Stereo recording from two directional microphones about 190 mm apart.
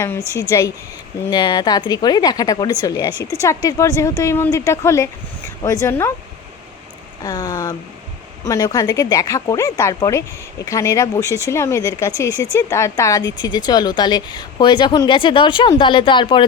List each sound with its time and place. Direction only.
0.5 s speech: 15° left (ahead or behind)
7.2 s speech: 20° left (ahead or behind)